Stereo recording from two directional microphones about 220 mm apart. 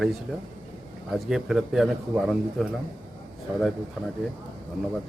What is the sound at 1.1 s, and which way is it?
A man's voice, centre (ahead or behind).